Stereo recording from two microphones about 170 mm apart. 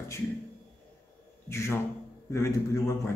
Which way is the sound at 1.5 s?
15° left (ahead or behind).